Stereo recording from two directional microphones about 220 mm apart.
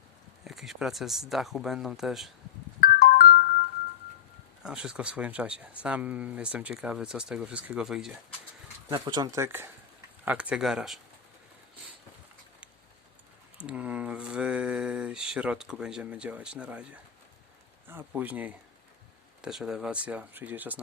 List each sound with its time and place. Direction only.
0.4 s speech: centre (ahead or behind)
2.8 s ringtone: 40° left (ahead or behind)
4.6 s speech: 5° right (ahead or behind)
8.9 s speech: 20° right (ahead or behind); by 11.0 s centre (ahead or behind)
13.6 s mantra: 5° right (ahead or behind)
17.8 s speech: 10° right (ahead or behind)